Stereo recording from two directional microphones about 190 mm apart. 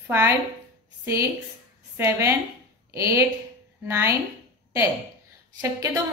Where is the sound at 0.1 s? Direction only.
10° right (ahead or behind).